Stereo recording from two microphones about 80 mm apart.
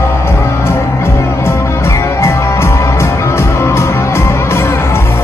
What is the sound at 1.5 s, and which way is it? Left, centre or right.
Music, left.